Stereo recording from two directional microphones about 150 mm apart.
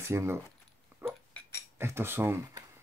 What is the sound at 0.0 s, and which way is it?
Speech, 20° right (ahead or behind).